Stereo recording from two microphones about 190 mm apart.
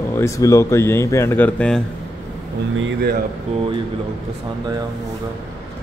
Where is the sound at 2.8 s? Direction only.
75° right (ahead or behind).